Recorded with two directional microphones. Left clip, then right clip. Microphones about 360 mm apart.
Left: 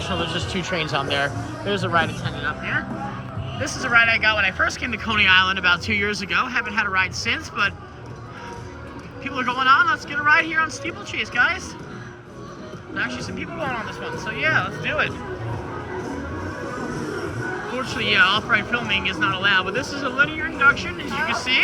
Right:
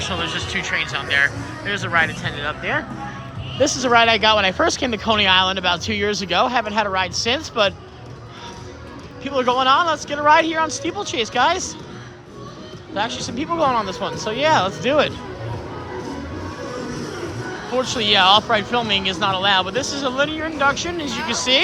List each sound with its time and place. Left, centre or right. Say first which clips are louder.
0.3 s speech: right 3 dB; centre
9.2 s speech: right 3 dB; centre
13.0 s speech: right 3 dB; centre
17.7 s speech: right 2 dB; centre